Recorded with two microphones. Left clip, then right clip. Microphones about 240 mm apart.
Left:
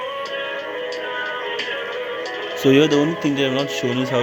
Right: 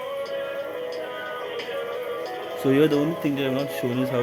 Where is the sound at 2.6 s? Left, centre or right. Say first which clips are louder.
Left 5 dB; centre.